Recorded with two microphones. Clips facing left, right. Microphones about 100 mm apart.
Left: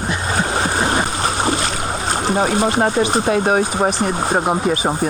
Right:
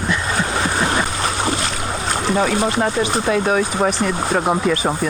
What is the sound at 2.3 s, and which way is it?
Speech, 30° left (ahead or behind).